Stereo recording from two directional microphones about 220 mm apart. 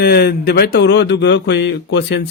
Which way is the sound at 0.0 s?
45° left (ahead or behind).